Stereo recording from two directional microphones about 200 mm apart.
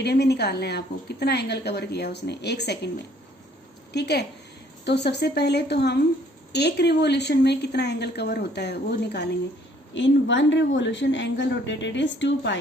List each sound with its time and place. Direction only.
0.0 s a woman's voice: 55° left (ahead or behind)
3.9 s a woman's voice: 55° left (ahead or behind)